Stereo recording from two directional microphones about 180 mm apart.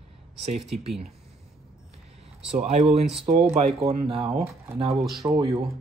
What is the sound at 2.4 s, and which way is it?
Speech, 35° right (ahead or behind).